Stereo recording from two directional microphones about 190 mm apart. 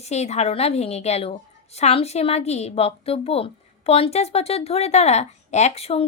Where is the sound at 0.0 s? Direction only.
35° left (ahead or behind).